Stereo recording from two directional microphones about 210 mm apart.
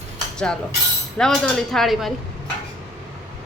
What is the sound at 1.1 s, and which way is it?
A woman's voice, 5° left (ahead or behind).